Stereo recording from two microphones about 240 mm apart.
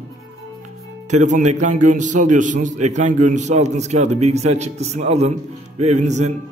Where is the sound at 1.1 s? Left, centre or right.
Right.